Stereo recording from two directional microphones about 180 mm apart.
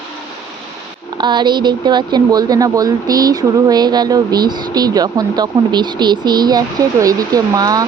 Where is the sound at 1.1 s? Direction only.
25° right (ahead or behind).